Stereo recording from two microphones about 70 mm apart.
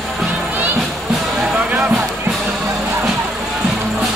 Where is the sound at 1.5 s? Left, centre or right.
Centre.